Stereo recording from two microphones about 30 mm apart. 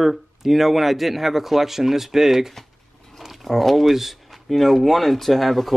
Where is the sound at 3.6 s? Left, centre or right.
Centre.